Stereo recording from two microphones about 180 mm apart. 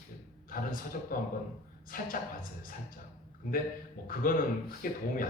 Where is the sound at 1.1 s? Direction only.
55° left (ahead or behind).